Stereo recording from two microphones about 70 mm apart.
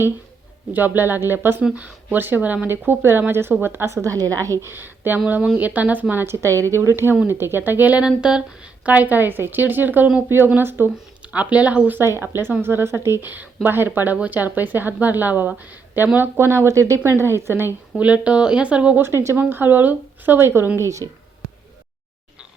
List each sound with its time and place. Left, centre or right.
0.7 s a woman's voice: right
1.6 s a woman's voice: centre
3.9 s a woman's voice: right
4.6 s a woman's voice: right
6.3 s speech: right
8.0 s a woman's voice: centre; by 10.9 s right
11.2 s speech: centre
11.9 s speech: right
13.3 s a woman's voice: right
17.9 s speech: centre
19.0 s a woman's voice: right
20.7 s a woman's voice: right